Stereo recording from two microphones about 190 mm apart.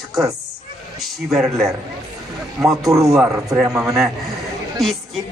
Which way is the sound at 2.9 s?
15° right (ahead or behind).